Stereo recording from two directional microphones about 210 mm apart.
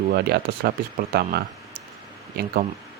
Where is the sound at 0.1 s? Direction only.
50° right (ahead or behind).